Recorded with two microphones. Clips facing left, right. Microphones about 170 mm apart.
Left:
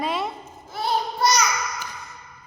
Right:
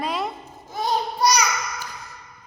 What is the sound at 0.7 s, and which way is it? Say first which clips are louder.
Child singing: right 1 dB; 15° right (ahead or behind).